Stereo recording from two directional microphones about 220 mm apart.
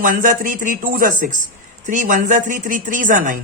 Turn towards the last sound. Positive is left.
turn(degrees=-35)  # may be behind; listen again after turning